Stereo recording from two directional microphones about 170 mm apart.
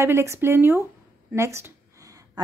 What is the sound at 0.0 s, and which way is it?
A woman's voice, 15° right (ahead or behind).